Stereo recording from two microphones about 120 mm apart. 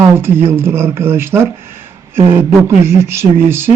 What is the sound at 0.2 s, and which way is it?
A man's voice, 20° right (ahead or behind).